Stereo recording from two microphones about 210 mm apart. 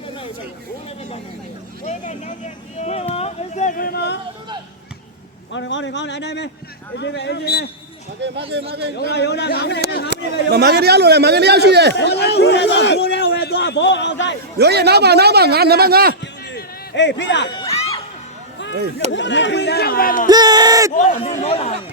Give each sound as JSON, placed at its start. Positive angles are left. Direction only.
{"t": 1.9, "sound": "vehicle", "side_deg": 35}
{"t": 2.7, "sound": "a sound", "side_deg": 30}
{"t": 5.5, "sound": "speech", "side_deg": 60}
{"t": 8.2, "sound": "speech", "side_deg": -55}
{"t": 9.0, "sound": "speech", "side_deg": 55}
{"t": 10.1, "sound": "a man's voice", "side_deg": -55}
{"t": 11.9, "sound": "a man's voice", "side_deg": 55}
{"t": 14.6, "sound": "a man's voice", "side_deg": -50}
{"t": 16.2, "sound": "a sound", "side_deg": 55}
{"t": 17.5, "sound": "music", "side_deg": 25}
{"t": 19.1, "sound": "speech", "side_deg": 60}
{"t": 20.2, "sound": "speech", "side_deg": -20}
{"t": 20.9, "sound": "a man's voice", "side_deg": 35}